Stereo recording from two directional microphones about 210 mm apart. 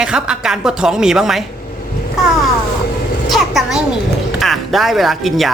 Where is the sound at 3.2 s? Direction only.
Centre (ahead or behind).